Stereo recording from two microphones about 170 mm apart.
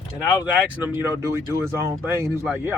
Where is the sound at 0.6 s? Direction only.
10° right (ahead or behind).